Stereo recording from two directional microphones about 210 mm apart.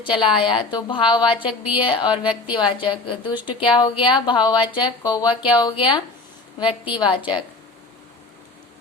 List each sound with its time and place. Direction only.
0.0 s speech: 25° left (ahead or behind)